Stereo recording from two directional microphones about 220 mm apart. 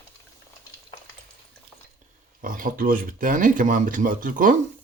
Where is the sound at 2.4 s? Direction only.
40° right (ahead or behind).